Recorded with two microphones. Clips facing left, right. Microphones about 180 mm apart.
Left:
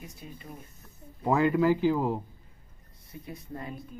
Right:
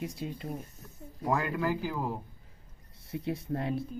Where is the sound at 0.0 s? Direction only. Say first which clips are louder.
Right 9 dB; 90° right.